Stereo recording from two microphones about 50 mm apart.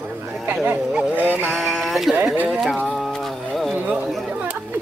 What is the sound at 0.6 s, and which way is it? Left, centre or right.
Speech, right.